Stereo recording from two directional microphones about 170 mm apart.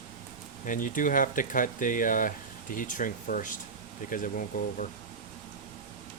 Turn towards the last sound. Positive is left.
turn(degrees=50)  # may be behind; listen again after turning